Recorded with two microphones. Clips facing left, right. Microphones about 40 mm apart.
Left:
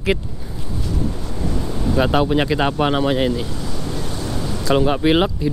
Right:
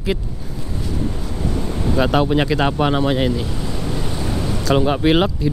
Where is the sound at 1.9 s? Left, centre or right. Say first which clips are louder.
Even; centre.